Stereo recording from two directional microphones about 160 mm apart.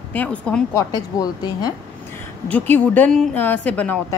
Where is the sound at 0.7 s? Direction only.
25° left (ahead or behind).